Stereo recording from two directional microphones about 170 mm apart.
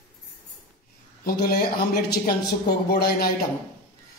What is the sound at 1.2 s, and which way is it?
Speech, 65° left (ahead or behind).